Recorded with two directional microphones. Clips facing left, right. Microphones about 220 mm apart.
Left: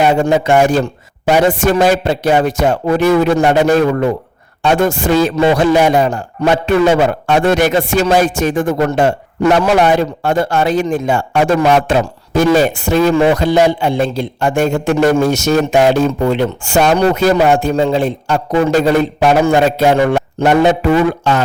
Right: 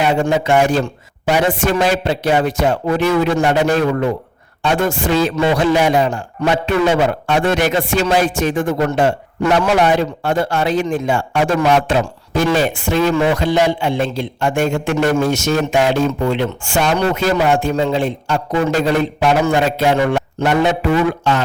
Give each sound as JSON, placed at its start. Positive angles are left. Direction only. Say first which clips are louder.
{"t": 0.0, "sound": "a man's voice", "louder": "left 4 dB", "side_deg": 45}